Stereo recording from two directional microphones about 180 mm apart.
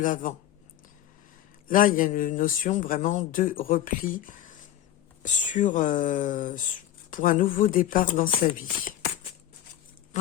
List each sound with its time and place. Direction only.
0.0 s speech: 45° left (ahead or behind)
1.6 s speech: 50° left (ahead or behind)